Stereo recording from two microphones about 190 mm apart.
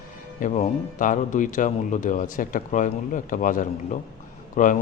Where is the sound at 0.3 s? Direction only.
40° left (ahead or behind).